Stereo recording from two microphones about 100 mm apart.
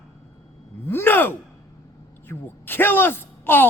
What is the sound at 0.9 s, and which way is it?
Speech, 20° left (ahead or behind).